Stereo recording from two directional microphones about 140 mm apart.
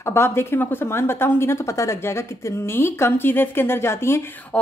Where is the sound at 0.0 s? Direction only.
20° left (ahead or behind).